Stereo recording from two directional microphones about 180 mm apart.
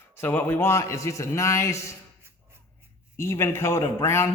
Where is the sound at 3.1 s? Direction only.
15° left (ahead or behind).